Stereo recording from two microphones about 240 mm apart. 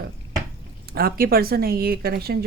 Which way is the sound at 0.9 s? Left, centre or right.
Right.